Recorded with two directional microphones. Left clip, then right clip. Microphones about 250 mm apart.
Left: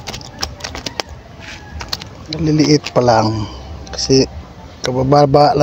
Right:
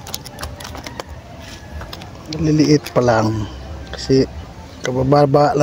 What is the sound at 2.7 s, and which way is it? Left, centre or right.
A man's voice, centre.